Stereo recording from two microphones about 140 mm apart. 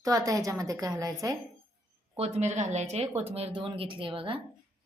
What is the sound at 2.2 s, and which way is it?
Speech, 50° right (ahead or behind).